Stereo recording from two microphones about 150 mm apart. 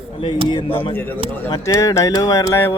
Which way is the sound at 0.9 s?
10° left (ahead or behind).